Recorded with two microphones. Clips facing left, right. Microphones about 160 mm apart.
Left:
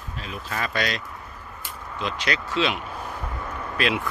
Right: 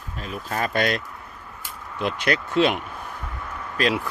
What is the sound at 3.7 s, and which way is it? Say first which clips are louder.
Speech: right 2 dB; 40° right (ahead or behind).